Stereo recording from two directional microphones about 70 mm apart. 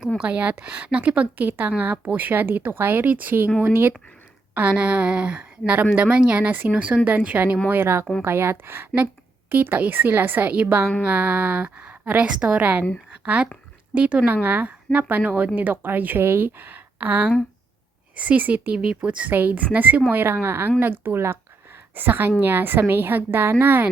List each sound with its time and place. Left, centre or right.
0.2 s a woman's voice: centre
4.5 s a woman's voice: right
7.7 s a woman's voice: right